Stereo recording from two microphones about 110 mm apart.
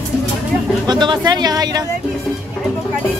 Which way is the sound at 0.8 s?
45° right (ahead or behind).